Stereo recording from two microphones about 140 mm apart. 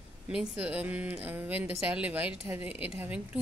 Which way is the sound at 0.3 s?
5° right (ahead or behind).